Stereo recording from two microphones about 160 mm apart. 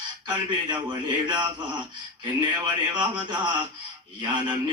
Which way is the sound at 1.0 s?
30° right (ahead or behind).